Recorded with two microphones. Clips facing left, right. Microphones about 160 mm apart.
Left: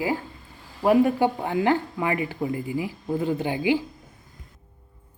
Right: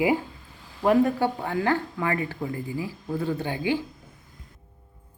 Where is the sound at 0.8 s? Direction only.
10° left (ahead or behind).